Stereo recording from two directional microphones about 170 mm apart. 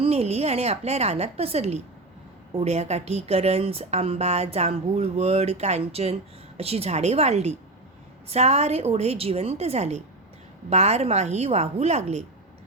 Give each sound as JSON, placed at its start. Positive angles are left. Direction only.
{"t": 0.0, "sound": "a woman's voice", "side_deg": -35}